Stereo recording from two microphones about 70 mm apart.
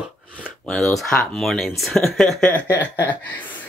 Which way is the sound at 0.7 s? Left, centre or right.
Centre.